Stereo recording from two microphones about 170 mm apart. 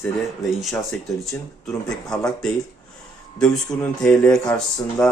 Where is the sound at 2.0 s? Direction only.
5° left (ahead or behind).